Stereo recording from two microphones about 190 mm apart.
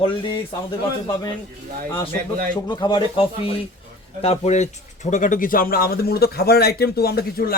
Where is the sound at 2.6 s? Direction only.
25° left (ahead or behind).